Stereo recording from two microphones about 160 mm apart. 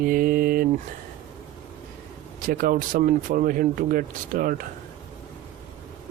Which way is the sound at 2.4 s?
60° right (ahead or behind).